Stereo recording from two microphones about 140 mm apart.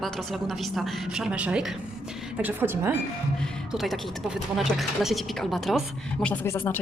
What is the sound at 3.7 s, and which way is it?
A woman's voice, centre (ahead or behind).